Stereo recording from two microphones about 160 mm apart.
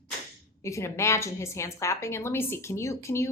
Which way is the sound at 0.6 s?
20° left (ahead or behind).